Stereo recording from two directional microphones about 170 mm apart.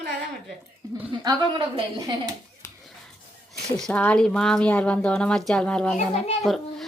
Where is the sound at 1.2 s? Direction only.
30° right (ahead or behind).